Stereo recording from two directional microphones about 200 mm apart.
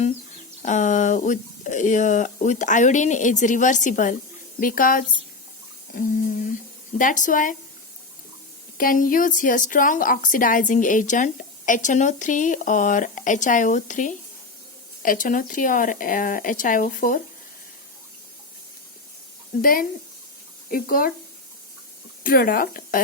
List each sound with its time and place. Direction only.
0.6 s a woman's voice: 40° left (ahead or behind)
8.8 s a woman's voice: 45° left (ahead or behind)
19.6 s speech: 45° left (ahead or behind)
22.2 s speech: 45° left (ahead or behind)